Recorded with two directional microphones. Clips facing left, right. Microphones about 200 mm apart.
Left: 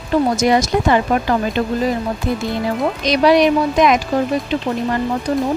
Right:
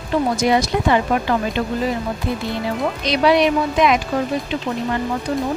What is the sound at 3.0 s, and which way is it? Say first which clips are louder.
Speech: left 3 dB; 40° left (ahead or behind).